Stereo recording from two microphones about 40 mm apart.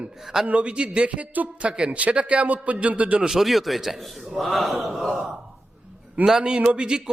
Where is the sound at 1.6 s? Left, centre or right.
Right.